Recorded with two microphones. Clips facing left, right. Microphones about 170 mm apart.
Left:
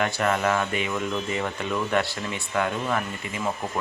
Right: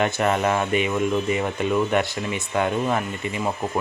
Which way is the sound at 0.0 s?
20° right (ahead or behind).